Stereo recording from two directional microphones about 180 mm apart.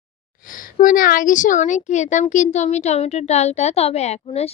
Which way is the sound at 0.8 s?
50° left (ahead or behind).